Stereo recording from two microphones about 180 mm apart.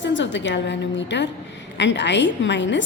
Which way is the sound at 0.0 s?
90° left.